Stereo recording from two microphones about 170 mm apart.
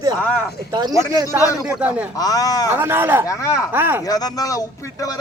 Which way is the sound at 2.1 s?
20° left (ahead or behind).